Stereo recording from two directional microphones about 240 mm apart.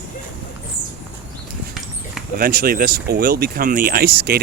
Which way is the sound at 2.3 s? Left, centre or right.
Right.